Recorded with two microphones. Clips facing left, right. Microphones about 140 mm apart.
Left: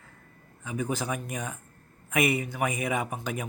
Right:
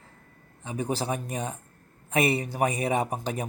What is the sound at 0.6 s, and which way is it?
Speech, 30° right (ahead or behind).